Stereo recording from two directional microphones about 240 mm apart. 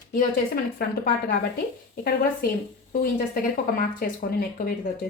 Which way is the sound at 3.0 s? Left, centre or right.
Left.